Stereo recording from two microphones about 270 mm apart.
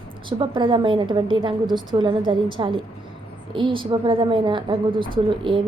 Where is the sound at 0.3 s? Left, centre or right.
Centre.